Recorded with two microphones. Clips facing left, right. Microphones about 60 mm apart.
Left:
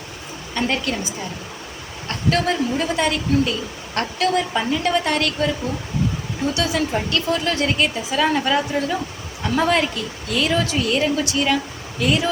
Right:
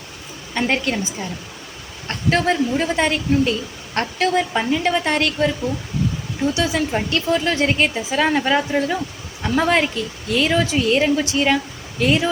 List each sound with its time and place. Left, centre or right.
0.5 s a woman's voice: right
6.5 s a woman's voice: right
7.1 s a woman's voice: right